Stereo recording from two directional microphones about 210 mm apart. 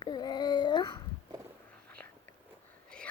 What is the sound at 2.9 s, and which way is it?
Whispering, 5° left (ahead or behind).